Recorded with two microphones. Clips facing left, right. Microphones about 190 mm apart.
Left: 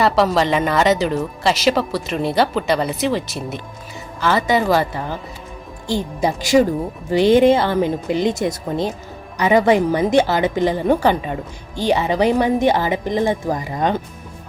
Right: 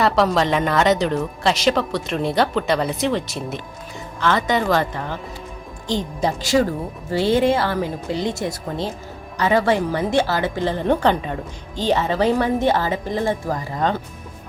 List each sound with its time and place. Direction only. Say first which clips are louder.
0.0 s a woman's voice: left 2 dB; centre (ahead or behind)